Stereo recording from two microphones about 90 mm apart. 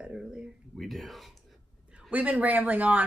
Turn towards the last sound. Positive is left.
turn(degrees=-20)  # may be behind; listen again after turning